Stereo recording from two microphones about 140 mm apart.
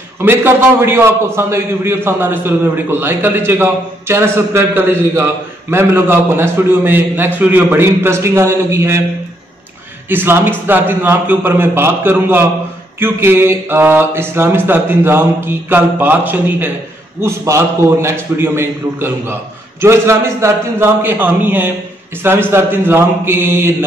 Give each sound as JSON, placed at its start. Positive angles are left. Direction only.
{"t": 0.2, "sound": "a man's voice", "side_deg": -15}
{"t": 10.0, "sound": "a man's voice", "side_deg": -15}